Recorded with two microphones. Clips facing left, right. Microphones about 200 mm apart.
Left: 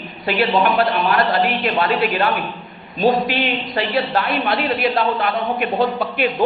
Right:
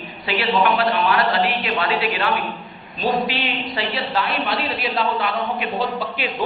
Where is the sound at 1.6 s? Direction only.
50° left (ahead or behind).